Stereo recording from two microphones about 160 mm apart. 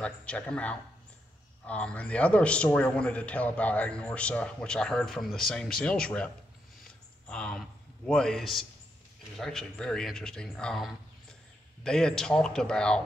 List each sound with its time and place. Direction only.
0.0 s a man's voice: 5° left (ahead or behind)